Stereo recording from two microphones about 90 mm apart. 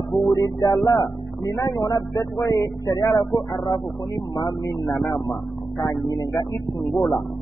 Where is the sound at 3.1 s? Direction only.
55° left (ahead or behind).